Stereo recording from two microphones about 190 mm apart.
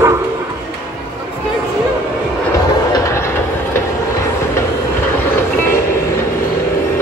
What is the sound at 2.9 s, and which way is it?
Train, 15° left (ahead or behind).